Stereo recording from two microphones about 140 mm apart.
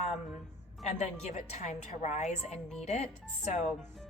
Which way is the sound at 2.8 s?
55° left (ahead or behind).